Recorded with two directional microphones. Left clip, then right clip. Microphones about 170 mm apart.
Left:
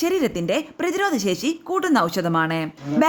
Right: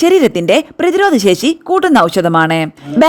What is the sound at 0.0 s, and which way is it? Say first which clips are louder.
A woman's voice: right 12 dB; 50° right (ahead or behind).